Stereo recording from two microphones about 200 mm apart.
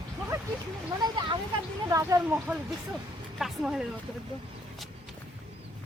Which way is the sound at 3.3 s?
Centre (ahead or behind).